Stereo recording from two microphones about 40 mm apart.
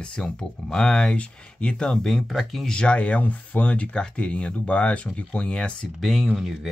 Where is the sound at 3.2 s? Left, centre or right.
Left.